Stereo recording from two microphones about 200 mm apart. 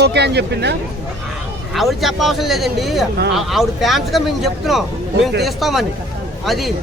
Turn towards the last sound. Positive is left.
turn(degrees=0)  # may be behind; listen again after turning